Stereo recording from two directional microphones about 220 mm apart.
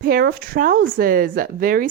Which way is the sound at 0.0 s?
45° right (ahead or behind).